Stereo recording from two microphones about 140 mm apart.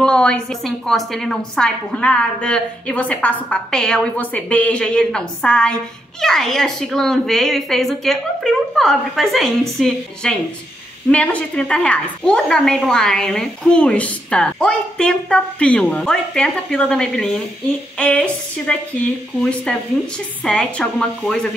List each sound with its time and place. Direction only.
0.0 s a woman's voice: 5° left (ahead or behind)